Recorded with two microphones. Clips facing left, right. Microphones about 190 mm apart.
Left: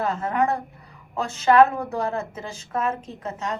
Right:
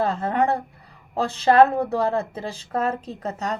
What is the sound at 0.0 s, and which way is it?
A woman's voice, 30° right (ahead or behind).